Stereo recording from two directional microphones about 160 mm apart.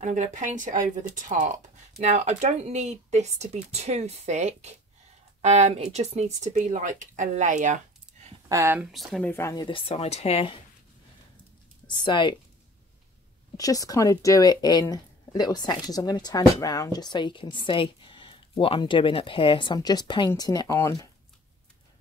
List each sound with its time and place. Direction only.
0.0 s speech: 50° right (ahead or behind)
8.5 s speech: 15° right (ahead or behind)
8.9 s speech: centre (ahead or behind)
9.3 s speech: 20° left (ahead or behind); by 10.6 s 35° left (ahead or behind)
11.9 s speech: 30° left (ahead or behind)
13.6 s speech: 20° left (ahead or behind)